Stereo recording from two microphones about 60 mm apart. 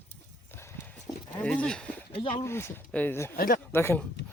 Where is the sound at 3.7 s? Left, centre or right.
Left.